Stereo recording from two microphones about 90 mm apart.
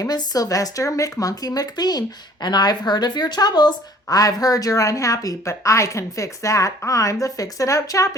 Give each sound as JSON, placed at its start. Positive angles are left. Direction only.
{"t": 0.0, "sound": "speech", "side_deg": 45}